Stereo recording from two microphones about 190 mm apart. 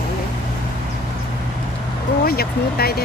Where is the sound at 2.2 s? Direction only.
55° left (ahead or behind).